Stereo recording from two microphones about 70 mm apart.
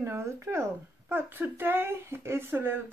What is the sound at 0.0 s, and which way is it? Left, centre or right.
Speech, right.